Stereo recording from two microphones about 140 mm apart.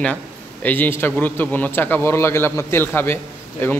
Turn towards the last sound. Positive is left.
turn(degrees=15)  # may be behind; listen again after turning